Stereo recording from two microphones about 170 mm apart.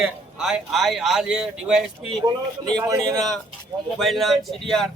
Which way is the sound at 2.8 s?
20° right (ahead or behind).